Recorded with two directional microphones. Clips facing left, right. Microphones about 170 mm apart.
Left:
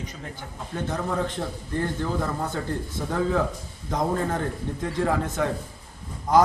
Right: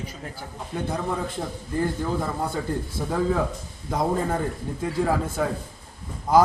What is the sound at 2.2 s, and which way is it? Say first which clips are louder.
A man's voice: right 1 dB; 10° right (ahead or behind).